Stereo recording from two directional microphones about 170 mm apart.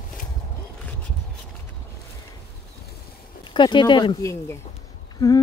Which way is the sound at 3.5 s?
25° left (ahead or behind).